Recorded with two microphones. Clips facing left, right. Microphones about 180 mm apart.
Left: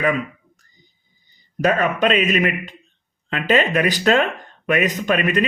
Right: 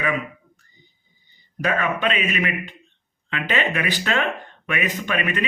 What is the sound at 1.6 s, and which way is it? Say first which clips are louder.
Speech: left 5 dB; 40° left (ahead or behind).